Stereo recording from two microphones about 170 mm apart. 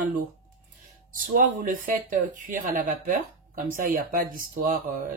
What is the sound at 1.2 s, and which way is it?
Speech, 55° right (ahead or behind).